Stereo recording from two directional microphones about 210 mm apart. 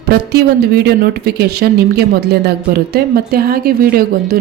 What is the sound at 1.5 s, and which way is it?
Speech, 50° right (ahead or behind).